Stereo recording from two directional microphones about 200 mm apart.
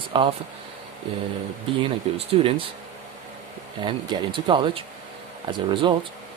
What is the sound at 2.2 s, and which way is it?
Speech, 30° right (ahead or behind).